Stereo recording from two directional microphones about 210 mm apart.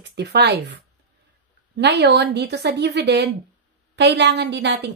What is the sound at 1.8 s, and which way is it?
A woman's voice, 50° right (ahead or behind).